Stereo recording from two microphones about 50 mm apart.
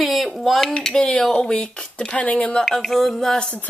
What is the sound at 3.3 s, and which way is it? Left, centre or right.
Speech, left.